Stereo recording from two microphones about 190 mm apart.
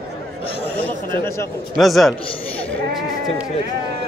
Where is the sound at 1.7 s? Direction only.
Centre (ahead or behind).